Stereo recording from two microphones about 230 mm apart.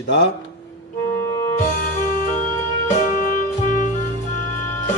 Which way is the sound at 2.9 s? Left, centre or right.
Left.